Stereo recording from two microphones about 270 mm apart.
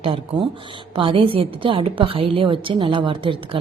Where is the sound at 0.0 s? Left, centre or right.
Centre.